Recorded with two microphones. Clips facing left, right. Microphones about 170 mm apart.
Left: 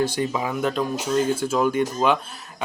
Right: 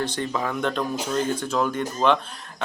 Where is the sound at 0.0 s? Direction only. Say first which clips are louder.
Left 3 dB; 5° left (ahead or behind).